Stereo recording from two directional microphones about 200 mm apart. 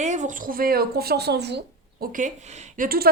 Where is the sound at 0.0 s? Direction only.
35° right (ahead or behind); by 2.0 s 55° right (ahead or behind).